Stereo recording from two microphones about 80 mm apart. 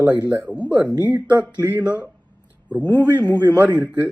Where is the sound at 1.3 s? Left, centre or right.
Right.